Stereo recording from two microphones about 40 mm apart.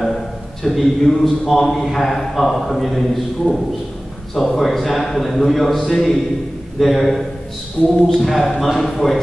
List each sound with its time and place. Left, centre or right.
0.7 s a man's voice: centre
7.8 s speech: left
8.1 s a man's voice: centre